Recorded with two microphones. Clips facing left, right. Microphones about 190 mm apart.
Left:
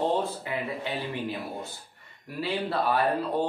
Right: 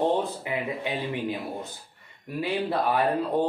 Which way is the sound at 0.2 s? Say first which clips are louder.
Right 1 dB; 15° right (ahead or behind).